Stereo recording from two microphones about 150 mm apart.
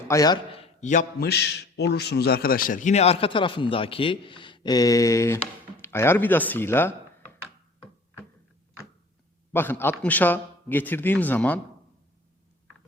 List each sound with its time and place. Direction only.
0.1 s a man's voice: 25° left (ahead or behind)
0.5 s a sound: 40° left (ahead or behind)
0.9 s a man's voice: 75° left (ahead or behind); by 6.9 s 15° left (ahead or behind)
9.5 s a man's voice: 15° left (ahead or behind)